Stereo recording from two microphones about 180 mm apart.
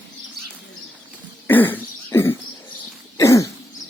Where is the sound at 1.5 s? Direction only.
10° left (ahead or behind).